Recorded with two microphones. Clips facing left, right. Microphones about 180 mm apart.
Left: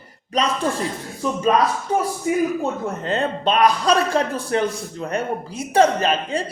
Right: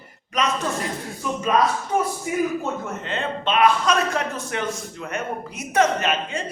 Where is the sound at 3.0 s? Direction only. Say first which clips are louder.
Left 5 dB; 40° left (ahead or behind).